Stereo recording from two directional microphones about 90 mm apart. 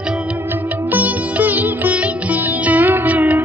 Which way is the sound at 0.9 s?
20° right (ahead or behind).